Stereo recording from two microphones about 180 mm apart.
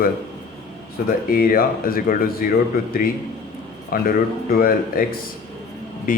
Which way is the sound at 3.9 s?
55° left (ahead or behind).